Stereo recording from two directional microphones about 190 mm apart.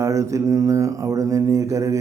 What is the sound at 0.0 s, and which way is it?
Mantra, 15° right (ahead or behind).